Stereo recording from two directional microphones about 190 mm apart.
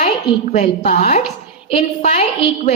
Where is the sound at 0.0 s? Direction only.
40° left (ahead or behind).